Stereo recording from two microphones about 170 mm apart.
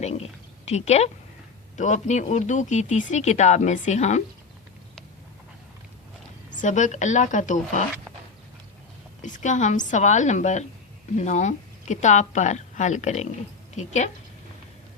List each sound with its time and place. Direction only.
0.0 s a woman's voice: 40° left (ahead or behind)
6.6 s speech: 45° left (ahead or behind)
9.2 s speech: 45° left (ahead or behind)